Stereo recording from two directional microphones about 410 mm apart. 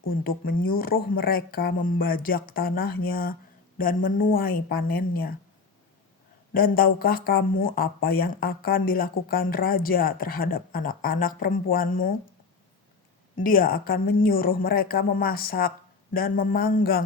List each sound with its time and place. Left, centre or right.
0.4 s speech: left
6.5 s speech: left
13.4 s speech: left